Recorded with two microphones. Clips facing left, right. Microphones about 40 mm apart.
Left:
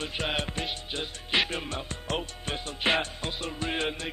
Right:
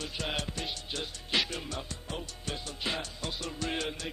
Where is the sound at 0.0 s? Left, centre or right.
Left.